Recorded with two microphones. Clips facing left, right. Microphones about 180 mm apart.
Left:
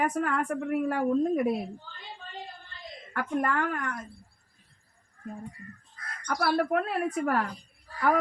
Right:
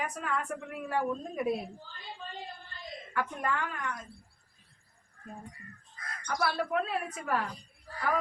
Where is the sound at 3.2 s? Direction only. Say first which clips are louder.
Left 5 dB; 55° left (ahead or behind).